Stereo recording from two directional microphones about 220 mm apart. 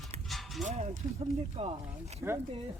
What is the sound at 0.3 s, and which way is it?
Dog, centre (ahead or behind).